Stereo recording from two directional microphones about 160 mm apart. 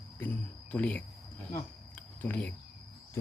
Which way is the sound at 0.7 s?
10° left (ahead or behind).